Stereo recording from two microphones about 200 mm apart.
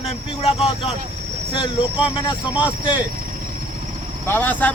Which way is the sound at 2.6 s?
25° left (ahead or behind).